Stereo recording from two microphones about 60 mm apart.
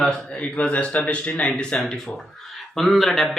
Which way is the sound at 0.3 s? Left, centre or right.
Centre.